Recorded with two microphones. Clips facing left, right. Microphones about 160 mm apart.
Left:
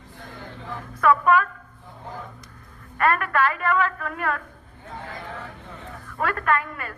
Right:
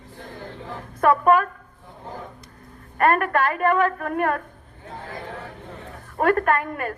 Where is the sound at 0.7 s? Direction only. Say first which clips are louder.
Right 1 dB; 45° right (ahead or behind).